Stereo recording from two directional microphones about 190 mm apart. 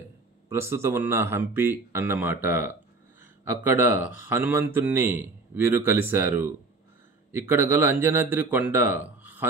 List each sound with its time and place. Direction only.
0.5 s speech: 15° right (ahead or behind)